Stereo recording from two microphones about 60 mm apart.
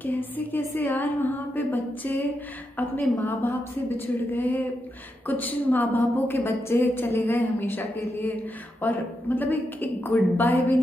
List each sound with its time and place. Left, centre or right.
0.0 s a woman's voice: left
10.3 s a woman's voice: left